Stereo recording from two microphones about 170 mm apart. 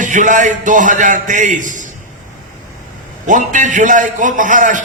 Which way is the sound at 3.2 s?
50° right (ahead or behind).